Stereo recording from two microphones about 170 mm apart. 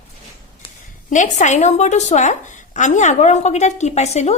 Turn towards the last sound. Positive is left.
turn(degrees=40)  # may be behind; listen again after turning